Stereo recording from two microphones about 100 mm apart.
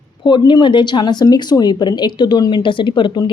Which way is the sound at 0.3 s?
50° left (ahead or behind).